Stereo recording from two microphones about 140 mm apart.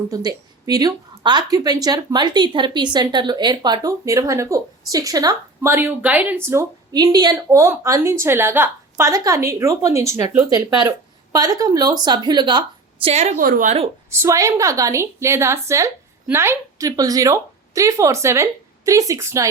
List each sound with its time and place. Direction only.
0.1 s a woman's voice: 25° right (ahead or behind)
5.7 s speech: 15° right (ahead or behind)
6.9 s a woman's voice: 30° right (ahead or behind)
13.1 s a woman's voice: 50° right (ahead or behind)
13.4 s speech: 75° right (ahead or behind)
14.1 s a woman's voice: 20° right (ahead or behind)